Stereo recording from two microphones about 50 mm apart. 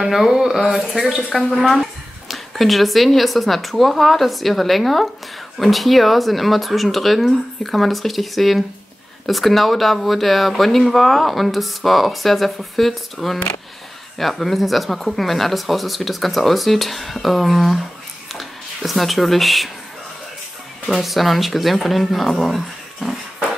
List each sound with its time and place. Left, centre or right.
0.0 s speech: centre
20.9 s speech: centre